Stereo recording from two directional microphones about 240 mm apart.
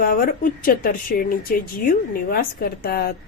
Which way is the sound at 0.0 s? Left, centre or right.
Left.